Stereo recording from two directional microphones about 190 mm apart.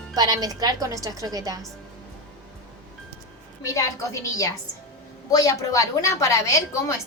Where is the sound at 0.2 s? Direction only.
20° right (ahead or behind).